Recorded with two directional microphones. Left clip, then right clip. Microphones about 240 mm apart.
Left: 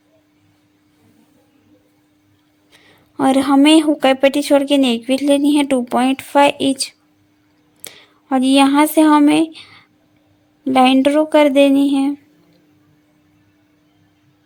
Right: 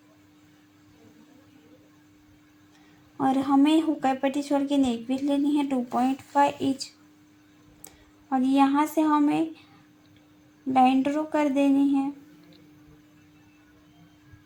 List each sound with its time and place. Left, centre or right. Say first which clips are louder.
3.2 s a woman's voice: left 9 dB; left
10.7 s a woman's voice: left 9 dB; left